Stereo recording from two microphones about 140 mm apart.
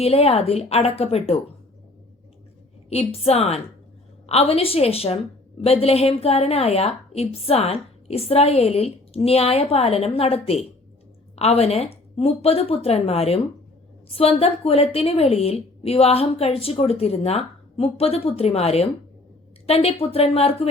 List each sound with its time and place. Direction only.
0.0 s a woman's voice: 45° left (ahead or behind)
2.9 s a woman's voice: 45° left (ahead or behind)